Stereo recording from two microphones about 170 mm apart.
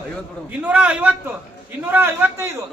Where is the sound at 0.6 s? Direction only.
5° right (ahead or behind).